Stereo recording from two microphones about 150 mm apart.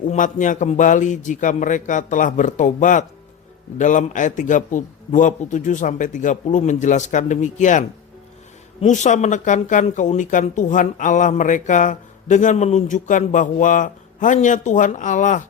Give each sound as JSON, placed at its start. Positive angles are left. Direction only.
{"t": 0.0, "sound": "speech", "side_deg": 60}